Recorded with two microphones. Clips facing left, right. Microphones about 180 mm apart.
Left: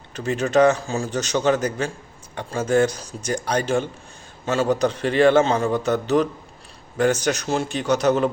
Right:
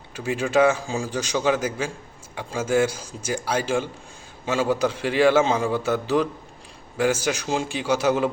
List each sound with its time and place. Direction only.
0.1 s a man's voice: 10° right (ahead or behind)
3.0 s speech: 70° left (ahead or behind)
3.2 s a man's voice: 5° right (ahead or behind)